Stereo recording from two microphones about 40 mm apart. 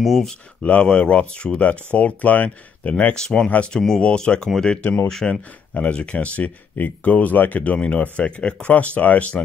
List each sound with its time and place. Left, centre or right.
0.0 s speech: centre
0.6 s speech: left
3.2 s speech: centre
4.0 s speech: left
5.0 s speech: centre
5.8 s speech: left